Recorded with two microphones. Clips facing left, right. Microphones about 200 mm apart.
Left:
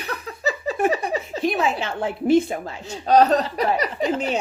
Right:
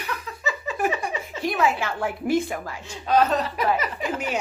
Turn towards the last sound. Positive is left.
turn(degrees=25)  # may be behind; listen again after turning